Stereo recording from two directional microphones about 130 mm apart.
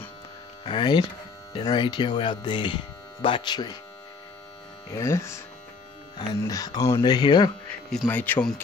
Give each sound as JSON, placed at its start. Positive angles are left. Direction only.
{"t": 0.7, "sound": "speech", "side_deg": 35}
{"t": 4.9, "sound": "speech", "side_deg": 20}
{"t": 8.1, "sound": "speech", "side_deg": 15}